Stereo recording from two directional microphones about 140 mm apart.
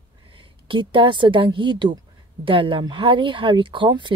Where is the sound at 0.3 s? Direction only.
35° right (ahead or behind).